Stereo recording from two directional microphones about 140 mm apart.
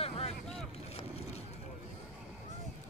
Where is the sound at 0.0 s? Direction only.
45° left (ahead or behind).